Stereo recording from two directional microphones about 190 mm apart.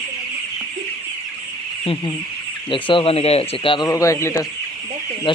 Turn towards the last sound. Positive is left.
turn(degrees=15)  # may be behind; listen again after turning